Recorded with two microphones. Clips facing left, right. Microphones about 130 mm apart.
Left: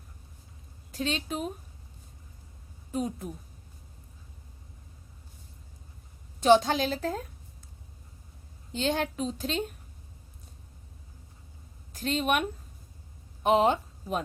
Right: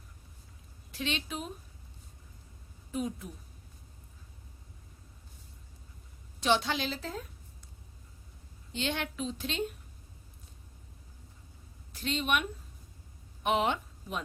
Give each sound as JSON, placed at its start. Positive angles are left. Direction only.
{"t": 0.9, "sound": "a woman's voice", "side_deg": 40}
{"t": 2.9, "sound": "a woman's voice", "side_deg": 40}
{"t": 6.4, "sound": "a woman's voice", "side_deg": 45}
{"t": 8.7, "sound": "a woman's voice", "side_deg": 40}
{"t": 11.9, "sound": "a woman's voice", "side_deg": 45}